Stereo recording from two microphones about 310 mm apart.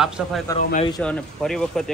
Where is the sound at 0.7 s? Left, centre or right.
Centre.